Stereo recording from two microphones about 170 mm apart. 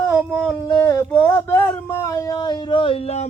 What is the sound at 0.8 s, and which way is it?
Speech, 20° left (ahead or behind).